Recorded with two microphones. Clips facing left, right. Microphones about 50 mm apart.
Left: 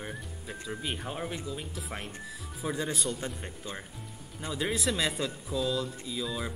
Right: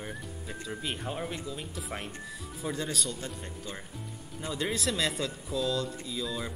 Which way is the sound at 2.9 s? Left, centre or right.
Left.